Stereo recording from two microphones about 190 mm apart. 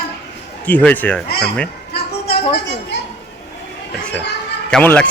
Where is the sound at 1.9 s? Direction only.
55° left (ahead or behind).